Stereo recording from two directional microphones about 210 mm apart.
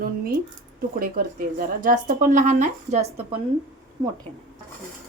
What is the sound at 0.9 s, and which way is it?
Speech, 45° right (ahead or behind).